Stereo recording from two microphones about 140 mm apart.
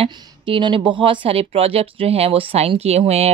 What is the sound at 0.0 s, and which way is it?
Speech, 35° right (ahead or behind).